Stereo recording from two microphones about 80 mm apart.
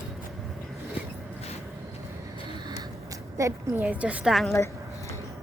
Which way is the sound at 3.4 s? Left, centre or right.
Right.